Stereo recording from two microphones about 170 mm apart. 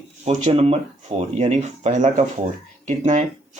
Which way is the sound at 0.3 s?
40° right (ahead or behind).